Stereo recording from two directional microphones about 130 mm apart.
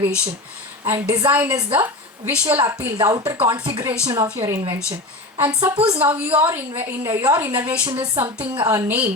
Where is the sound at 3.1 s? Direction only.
30° right (ahead or behind).